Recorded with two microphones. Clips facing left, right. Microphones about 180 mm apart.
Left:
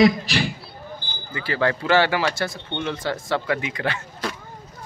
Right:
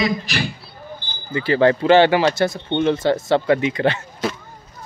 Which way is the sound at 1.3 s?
25° right (ahead or behind).